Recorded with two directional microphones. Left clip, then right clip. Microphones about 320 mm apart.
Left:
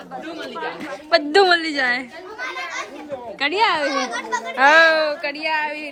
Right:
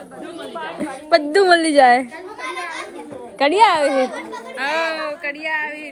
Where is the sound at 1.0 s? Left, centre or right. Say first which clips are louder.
Right 1 dB; centre.